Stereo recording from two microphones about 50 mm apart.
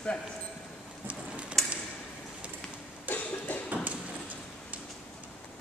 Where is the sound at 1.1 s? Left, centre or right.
Right.